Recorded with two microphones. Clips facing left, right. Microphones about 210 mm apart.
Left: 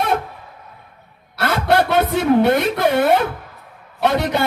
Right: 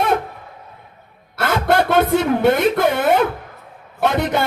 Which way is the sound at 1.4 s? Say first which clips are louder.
Even; 50° right (ahead or behind).